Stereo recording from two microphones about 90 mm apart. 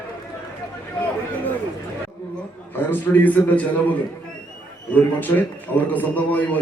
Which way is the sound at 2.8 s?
20° left (ahead or behind).